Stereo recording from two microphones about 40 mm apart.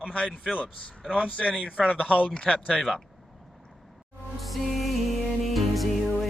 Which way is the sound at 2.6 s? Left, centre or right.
Centre.